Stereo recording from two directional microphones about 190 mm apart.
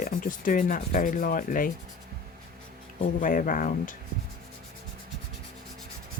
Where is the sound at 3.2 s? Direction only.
45° left (ahead or behind).